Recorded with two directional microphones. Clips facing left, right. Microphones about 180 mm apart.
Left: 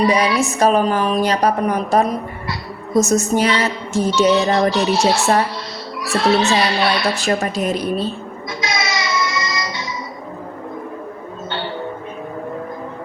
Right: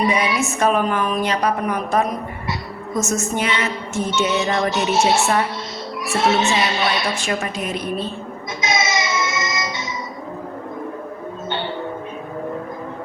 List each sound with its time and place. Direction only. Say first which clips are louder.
0.3 s a woman's voice: left 3 dB; 35° left (ahead or behind)
4.7 s speech: left 1 dB; 20° right (ahead or behind)
7.0 s a woman's voice: left 4 dB; 35° left (ahead or behind)
8.6 s music: right 2 dB; 20° right (ahead or behind)